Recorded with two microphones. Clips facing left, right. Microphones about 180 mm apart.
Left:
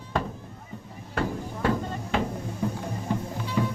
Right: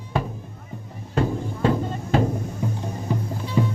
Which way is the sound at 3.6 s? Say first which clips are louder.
Right 4 dB; 20° right (ahead or behind).